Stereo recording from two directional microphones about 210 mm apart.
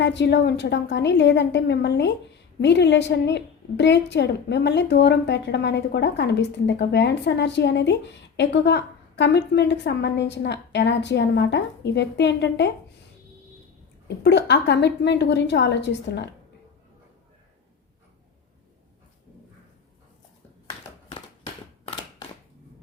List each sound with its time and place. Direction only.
0.0 s a woman's voice: 55° left (ahead or behind)
14.3 s a woman's voice: 55° left (ahead or behind)